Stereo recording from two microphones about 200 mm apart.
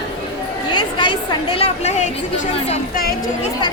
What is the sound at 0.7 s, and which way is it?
A woman's voice, 25° left (ahead or behind).